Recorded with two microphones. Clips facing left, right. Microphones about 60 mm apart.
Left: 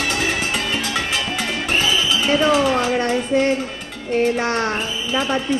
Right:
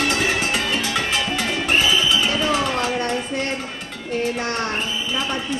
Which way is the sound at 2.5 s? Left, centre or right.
Centre.